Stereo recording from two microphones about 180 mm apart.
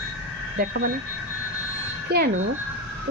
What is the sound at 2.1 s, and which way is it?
Speech, 65° right (ahead or behind).